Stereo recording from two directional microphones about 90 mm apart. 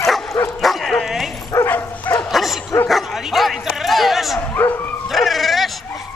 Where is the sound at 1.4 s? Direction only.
25° left (ahead or behind).